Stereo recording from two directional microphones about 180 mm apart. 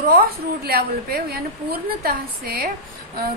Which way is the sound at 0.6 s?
60° right (ahead or behind).